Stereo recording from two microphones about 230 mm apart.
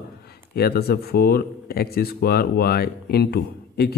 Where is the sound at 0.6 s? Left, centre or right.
Left.